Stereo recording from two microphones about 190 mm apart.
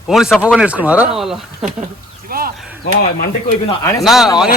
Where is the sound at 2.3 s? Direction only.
50° right (ahead or behind).